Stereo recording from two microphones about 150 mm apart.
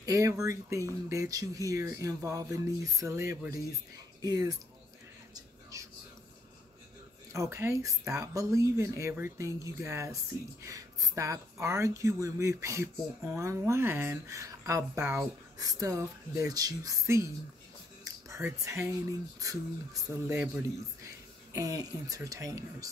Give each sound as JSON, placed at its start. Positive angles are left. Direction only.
{"t": 0.0, "sound": "speech", "side_deg": -20}
{"t": 5.3, "sound": "whispering", "side_deg": -20}
{"t": 7.3, "sound": "speech", "side_deg": -20}
{"t": 18.0, "sound": "a sound", "side_deg": -20}
{"t": 19.4, "sound": "speech", "side_deg": -20}